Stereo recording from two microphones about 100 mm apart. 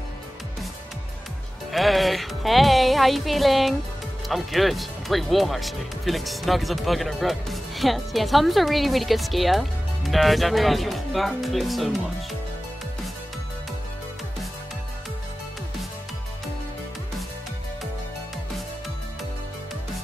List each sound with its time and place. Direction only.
1.7 s speech: centre (ahead or behind)